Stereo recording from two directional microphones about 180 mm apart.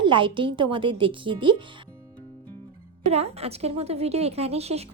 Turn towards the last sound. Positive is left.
turn(degrees=-35)  # may be behind; listen again after turning